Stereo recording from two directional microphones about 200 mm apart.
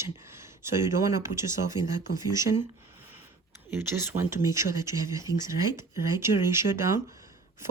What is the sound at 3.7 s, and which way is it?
Speech, 10° right (ahead or behind).